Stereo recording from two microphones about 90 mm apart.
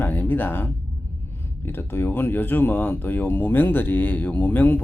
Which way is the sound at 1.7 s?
25° left (ahead or behind).